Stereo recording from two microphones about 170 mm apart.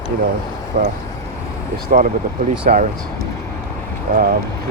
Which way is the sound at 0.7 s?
40° right (ahead or behind).